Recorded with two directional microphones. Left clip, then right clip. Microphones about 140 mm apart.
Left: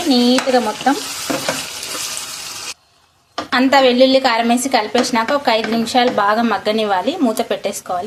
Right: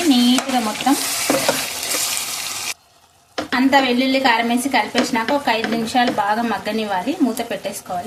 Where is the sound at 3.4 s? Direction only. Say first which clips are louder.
Left 4 dB; 25° left (ahead or behind).